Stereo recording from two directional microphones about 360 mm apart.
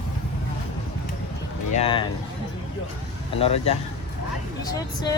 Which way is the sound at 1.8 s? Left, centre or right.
Centre.